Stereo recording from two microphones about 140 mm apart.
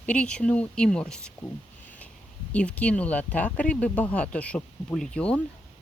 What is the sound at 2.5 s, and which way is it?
Speech, 10° left (ahead or behind).